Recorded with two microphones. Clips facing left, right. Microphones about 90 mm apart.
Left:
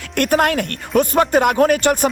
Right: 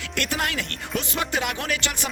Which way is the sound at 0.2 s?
50° left (ahead or behind).